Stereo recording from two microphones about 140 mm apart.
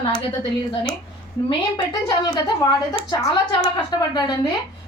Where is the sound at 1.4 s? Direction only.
30° left (ahead or behind).